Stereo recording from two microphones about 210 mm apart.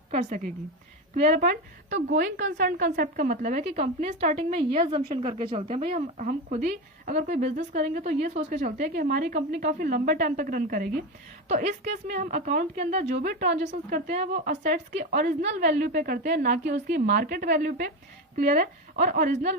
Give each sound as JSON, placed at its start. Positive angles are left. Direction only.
{"t": 0.1, "sound": "a woman's voice", "side_deg": -35}